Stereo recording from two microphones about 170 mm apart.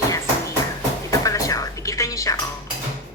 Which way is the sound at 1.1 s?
20° left (ahead or behind).